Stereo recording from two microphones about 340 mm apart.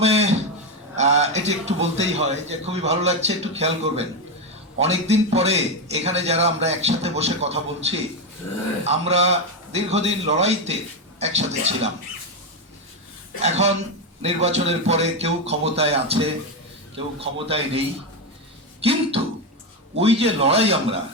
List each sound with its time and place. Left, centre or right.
0.0 s a sound: centre
0.9 s a man's voice: centre
8.8 s a man's voice: centre
13.4 s a man's voice: centre